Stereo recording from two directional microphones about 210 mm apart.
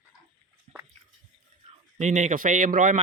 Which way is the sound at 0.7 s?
35° right (ahead or behind).